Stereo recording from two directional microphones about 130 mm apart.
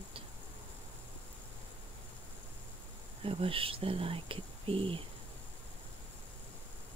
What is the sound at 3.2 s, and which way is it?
Speech, 45° right (ahead or behind).